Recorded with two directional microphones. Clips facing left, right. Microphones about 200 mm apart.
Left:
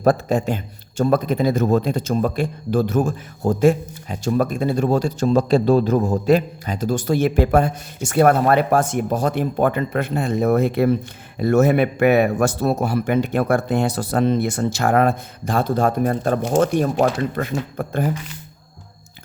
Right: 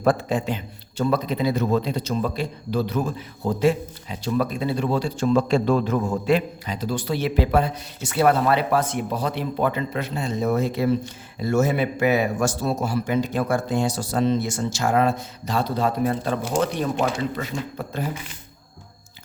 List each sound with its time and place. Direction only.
0.0 s a man's voice: 40° left (ahead or behind)